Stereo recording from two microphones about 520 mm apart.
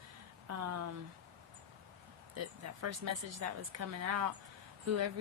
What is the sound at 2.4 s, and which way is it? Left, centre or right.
Speech, right.